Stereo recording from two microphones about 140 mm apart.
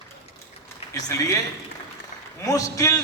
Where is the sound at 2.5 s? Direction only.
25° left (ahead or behind).